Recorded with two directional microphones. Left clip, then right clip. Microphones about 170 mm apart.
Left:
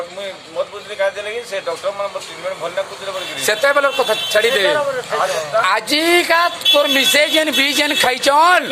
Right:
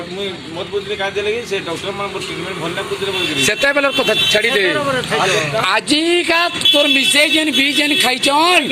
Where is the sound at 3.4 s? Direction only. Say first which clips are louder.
Left 1 dB; 10° left (ahead or behind).